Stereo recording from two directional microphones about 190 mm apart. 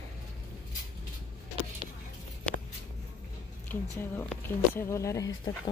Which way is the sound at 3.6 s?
10° left (ahead or behind).